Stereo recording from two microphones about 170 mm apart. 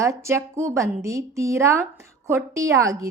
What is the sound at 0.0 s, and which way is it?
A woman's voice, 15° right (ahead or behind).